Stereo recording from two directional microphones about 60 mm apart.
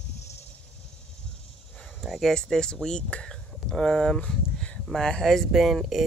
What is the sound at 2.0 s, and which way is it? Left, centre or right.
Speech, centre.